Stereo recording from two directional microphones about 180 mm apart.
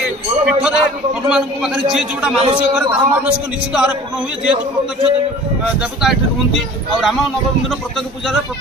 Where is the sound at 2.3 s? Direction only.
30° right (ahead or behind).